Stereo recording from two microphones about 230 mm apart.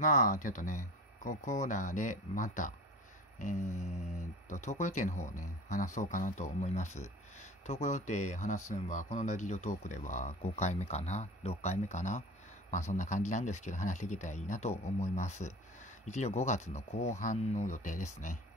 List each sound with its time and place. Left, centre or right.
0.0 s speech: left